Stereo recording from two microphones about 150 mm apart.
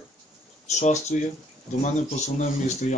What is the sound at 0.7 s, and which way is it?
Speech, 50° left (ahead or behind).